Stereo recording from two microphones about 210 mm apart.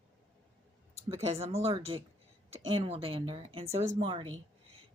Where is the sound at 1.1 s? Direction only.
30° right (ahead or behind).